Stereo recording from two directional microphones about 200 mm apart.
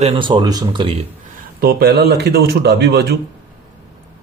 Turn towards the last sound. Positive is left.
turn(degrees=-55)  # may be behind; listen again after turning